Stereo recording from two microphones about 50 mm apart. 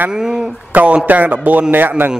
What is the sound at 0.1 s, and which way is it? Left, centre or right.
Speech, centre.